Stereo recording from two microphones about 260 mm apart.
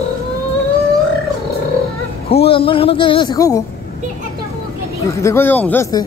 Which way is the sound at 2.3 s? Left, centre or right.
Left.